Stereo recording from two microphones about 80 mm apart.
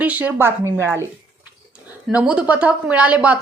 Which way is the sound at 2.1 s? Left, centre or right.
Centre.